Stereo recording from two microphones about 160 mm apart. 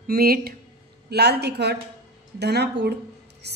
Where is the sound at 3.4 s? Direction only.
90° right.